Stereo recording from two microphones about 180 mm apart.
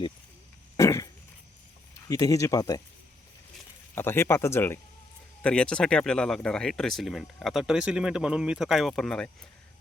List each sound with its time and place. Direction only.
0.8 s a sound: 15° left (ahead or behind)
2.0 s speech: 20° left (ahead or behind)
3.9 s speech: 10° left (ahead or behind)